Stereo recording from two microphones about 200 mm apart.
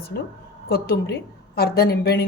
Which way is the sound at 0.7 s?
50° left (ahead or behind).